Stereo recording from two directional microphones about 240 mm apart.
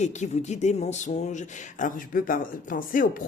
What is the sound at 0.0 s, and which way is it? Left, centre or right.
Speech, left.